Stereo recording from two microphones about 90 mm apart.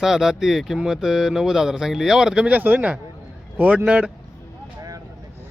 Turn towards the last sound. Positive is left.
turn(degrees=-15)  # may be behind; listen again after turning